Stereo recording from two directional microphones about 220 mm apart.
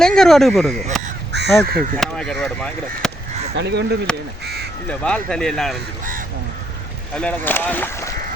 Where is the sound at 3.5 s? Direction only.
50° right (ahead or behind).